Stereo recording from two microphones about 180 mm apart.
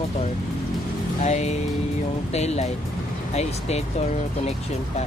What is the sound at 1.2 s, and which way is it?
Speech, 40° left (ahead or behind).